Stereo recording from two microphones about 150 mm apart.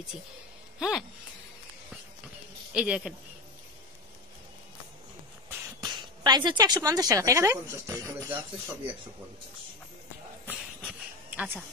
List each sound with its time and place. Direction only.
0.7 s speech: 5° right (ahead or behind)
2.7 s speech: 5° right (ahead or behind)
5.8 s a woman's voice: 30° right (ahead or behind)
10.8 s a sound: 10° right (ahead or behind)